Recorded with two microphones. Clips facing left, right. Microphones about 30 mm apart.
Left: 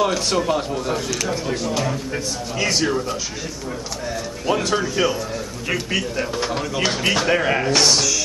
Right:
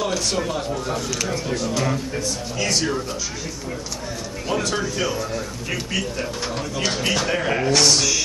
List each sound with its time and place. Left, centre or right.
0.0 s a man's voice: centre
4.5 s a man's voice: centre